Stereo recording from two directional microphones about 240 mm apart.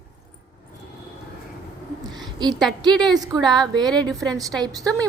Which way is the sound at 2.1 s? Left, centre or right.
Centre.